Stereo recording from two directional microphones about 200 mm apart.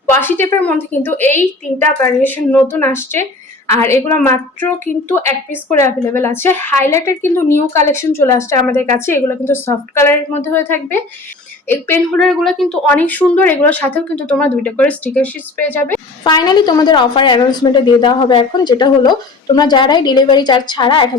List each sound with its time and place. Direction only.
0.1 s a woman's voice: 10° left (ahead or behind)
16.2 s a woman's voice: 20° left (ahead or behind)